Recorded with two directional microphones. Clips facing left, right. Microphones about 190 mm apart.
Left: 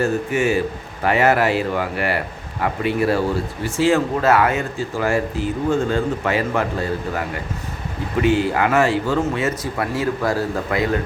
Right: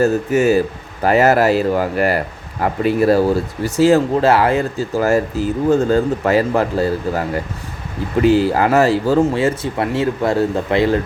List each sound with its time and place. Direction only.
0.0 s speech: 40° right (ahead or behind)
8.2 s speech: 35° right (ahead or behind)